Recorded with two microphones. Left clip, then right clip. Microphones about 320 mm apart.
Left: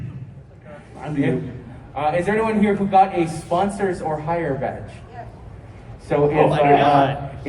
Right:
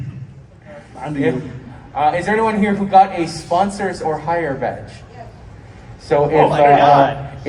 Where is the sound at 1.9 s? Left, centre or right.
Right.